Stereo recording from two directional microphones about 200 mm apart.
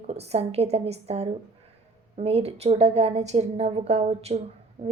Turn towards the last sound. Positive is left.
turn(degrees=-25)  # may be behind; listen again after turning